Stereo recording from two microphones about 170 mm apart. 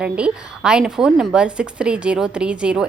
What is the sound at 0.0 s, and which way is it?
A woman's voice, 5° right (ahead or behind).